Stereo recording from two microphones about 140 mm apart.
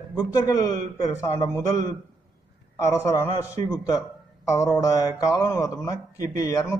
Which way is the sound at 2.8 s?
20° left (ahead or behind).